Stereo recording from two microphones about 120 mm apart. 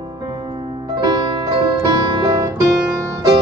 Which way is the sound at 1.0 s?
35° right (ahead or behind).